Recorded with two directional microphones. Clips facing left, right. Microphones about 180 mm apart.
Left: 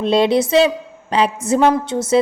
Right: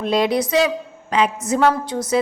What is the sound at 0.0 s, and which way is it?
A woman's voice, 30° left (ahead or behind).